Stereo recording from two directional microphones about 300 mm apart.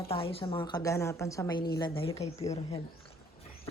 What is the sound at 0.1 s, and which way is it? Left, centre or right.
Speech, centre.